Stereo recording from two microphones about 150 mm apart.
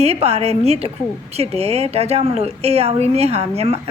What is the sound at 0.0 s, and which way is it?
A woman's voice, 45° right (ahead or behind).